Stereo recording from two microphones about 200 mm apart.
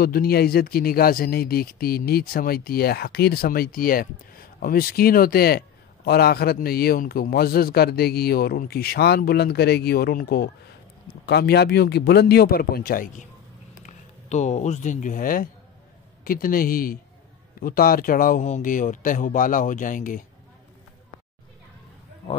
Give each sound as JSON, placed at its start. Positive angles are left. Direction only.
{"t": 0.0, "sound": "speech", "side_deg": 50}